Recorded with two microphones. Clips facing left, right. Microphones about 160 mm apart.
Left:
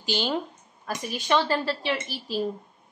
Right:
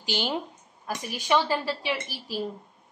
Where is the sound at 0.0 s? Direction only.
15° right (ahead or behind).